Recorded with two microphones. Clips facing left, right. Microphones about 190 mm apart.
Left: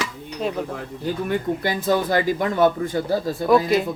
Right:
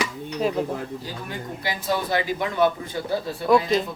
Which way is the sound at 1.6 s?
45° left (ahead or behind).